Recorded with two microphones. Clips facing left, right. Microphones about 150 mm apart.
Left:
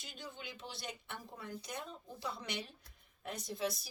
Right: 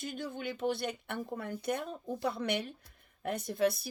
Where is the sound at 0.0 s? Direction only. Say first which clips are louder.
Right 11 dB; 55° right (ahead or behind).